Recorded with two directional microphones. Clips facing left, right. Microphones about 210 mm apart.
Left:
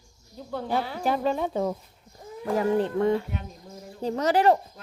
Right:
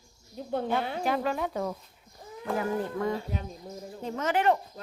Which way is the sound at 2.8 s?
25° left (ahead or behind).